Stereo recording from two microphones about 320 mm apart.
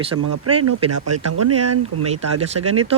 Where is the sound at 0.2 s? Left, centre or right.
Right.